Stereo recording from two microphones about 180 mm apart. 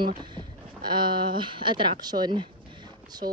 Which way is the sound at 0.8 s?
25° right (ahead or behind).